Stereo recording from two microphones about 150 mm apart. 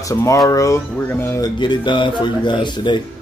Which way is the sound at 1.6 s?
30° left (ahead or behind).